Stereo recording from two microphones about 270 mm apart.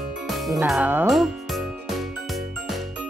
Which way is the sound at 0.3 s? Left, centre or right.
Centre.